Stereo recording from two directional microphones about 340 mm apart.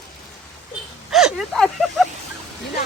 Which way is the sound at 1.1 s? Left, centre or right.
Centre.